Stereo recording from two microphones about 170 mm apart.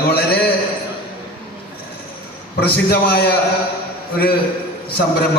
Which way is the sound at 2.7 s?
65° left (ahead or behind).